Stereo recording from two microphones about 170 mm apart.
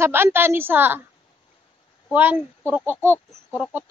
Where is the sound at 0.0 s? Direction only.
15° right (ahead or behind).